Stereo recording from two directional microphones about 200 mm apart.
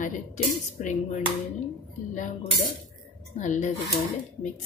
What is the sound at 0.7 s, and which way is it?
A woman's voice, 35° left (ahead or behind).